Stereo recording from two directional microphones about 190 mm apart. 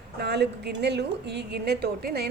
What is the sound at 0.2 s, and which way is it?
A woman's voice, 60° right (ahead or behind).